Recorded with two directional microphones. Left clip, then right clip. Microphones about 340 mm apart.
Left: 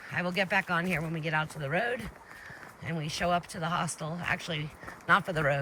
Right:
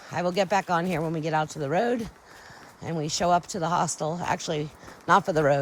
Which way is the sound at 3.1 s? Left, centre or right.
Centre.